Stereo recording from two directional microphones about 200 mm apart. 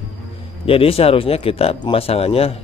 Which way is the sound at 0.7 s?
30° left (ahead or behind).